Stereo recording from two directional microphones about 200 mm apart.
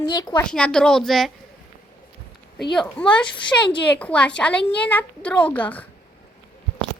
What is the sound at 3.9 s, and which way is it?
A woman's voice, 5° left (ahead or behind).